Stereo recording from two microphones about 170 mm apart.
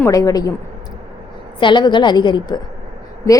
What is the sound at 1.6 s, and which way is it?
A woman's voice, 25° left (ahead or behind).